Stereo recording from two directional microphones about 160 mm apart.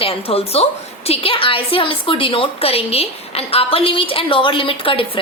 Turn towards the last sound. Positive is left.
turn(degrees=35)  # may be behind; listen again after turning